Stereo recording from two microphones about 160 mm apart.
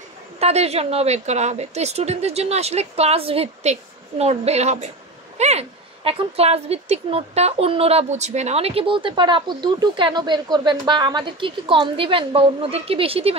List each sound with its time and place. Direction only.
0.4 s a woman's voice: 40° right (ahead or behind)